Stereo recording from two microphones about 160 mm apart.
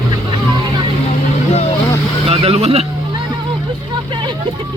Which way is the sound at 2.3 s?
40° right (ahead or behind).